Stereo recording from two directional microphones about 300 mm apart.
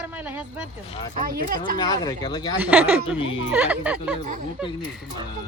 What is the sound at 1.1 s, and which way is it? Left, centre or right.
Speech, right.